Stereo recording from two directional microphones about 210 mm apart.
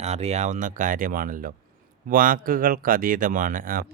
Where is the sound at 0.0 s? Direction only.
30° right (ahead or behind).